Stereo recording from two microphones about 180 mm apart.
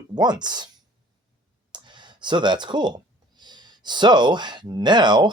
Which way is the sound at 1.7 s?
25° right (ahead or behind).